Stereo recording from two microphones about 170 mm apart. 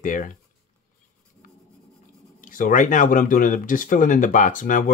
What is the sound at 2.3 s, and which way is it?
Speech, 50° left (ahead or behind).